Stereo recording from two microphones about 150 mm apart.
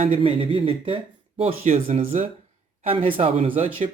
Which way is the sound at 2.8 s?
40° right (ahead or behind).